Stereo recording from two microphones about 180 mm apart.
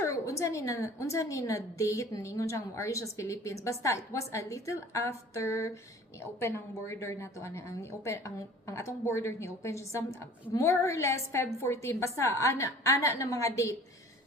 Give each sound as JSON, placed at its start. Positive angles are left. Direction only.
{"t": 0.0, "sound": "a woman's voice", "side_deg": 15}